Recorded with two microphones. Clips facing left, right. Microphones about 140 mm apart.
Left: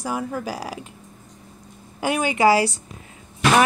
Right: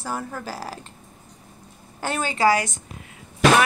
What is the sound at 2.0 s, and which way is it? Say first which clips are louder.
Speech: left 3 dB; 15° left (ahead or behind).